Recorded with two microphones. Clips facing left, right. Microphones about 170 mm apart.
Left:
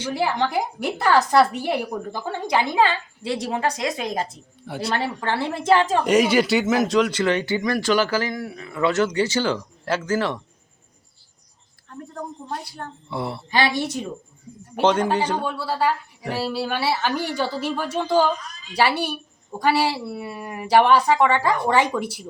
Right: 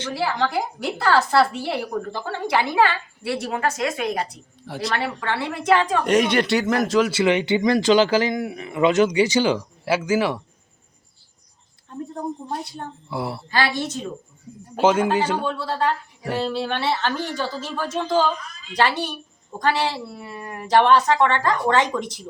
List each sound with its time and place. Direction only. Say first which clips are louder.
0.0 s a woman's voice: left 1 dB; 15° left (ahead or behind)
4.6 s speech: right 1 dB; centre (ahead or behind)
5.2 s a woman's voice: left 1 dB; 35° left (ahead or behind)
6.1 s speech: left 1 dB; 5° left (ahead or behind)
11.9 s a woman's voice: right 5 dB; 25° right (ahead or behind)
13.1 s a woman's voice: even; centre (ahead or behind)
13.5 s a woman's voice: left 2 dB; 15° left (ahead or behind)
14.8 s speech: right 1 dB; 5° right (ahead or behind)
15.4 s a woman's voice: even; 10° left (ahead or behind)